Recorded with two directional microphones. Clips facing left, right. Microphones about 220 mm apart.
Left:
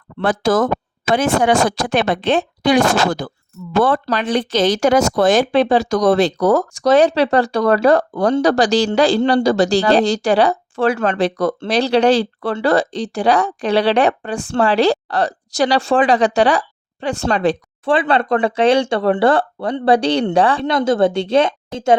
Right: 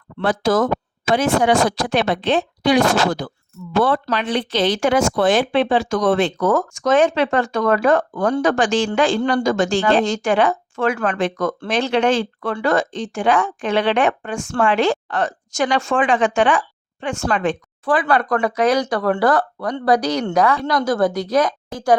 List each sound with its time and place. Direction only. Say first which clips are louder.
0.2 s a woman's voice: left 2 dB; 50° left (ahead or behind); by 21.9 s 25° left (ahead or behind)